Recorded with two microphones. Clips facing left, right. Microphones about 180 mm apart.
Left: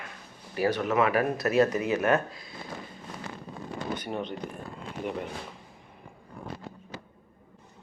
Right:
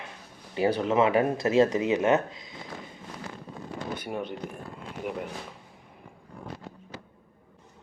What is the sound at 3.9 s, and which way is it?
Speech, 10° right (ahead or behind).